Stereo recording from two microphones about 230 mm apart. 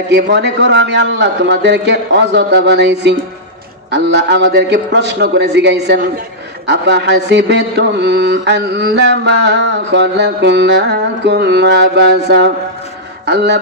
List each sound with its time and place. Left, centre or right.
0.1 s mantra: right
13.2 s speech: right